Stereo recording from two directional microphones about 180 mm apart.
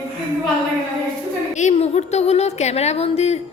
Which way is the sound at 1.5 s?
40° left (ahead or behind).